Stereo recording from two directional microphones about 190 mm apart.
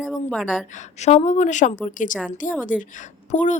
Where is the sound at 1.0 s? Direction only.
35° left (ahead or behind).